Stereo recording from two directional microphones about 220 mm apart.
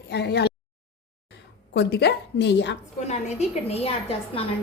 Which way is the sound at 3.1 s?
30° left (ahead or behind).